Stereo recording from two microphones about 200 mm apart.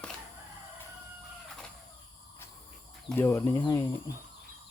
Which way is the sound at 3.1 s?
10° left (ahead or behind).